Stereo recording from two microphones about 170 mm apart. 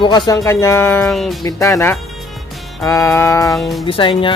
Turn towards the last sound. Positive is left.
turn(degrees=30)  # may be behind; listen again after turning